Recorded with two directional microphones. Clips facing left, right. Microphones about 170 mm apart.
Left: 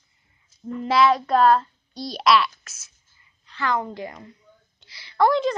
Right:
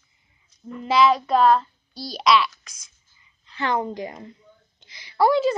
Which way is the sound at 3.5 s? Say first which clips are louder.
Right 1 dB; 20° right (ahead or behind).